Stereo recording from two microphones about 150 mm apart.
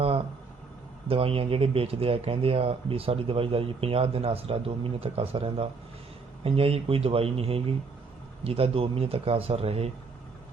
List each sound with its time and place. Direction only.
1.0 s speech: 40° right (ahead or behind)